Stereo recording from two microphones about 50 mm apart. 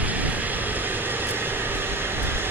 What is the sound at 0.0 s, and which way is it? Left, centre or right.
Vehicle, right.